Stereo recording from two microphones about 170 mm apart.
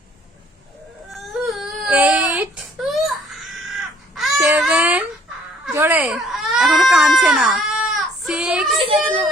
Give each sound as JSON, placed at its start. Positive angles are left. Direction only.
{"t": 1.1, "sound": "baby cry", "side_deg": 0}
{"t": 8.8, "sound": "a child's voice", "side_deg": -30}